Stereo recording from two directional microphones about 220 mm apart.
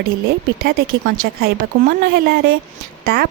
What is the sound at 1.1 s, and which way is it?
A woman's voice, 45° right (ahead or behind).